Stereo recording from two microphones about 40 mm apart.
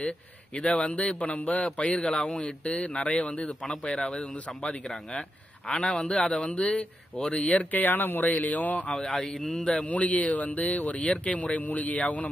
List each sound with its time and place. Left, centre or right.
0.7 s speech: left
1.3 s speech: left
2.0 s speech: left
5.9 s speech: left
7.5 s speech: left
9.1 s a man's voice: centre
9.8 s speech: left